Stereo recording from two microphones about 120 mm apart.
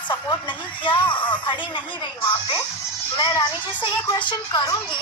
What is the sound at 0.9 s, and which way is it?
Speech, 40° left (ahead or behind).